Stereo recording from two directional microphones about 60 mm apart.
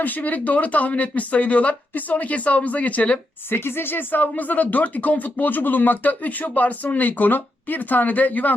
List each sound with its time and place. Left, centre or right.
0.0 s speech: left
3.5 s speech: left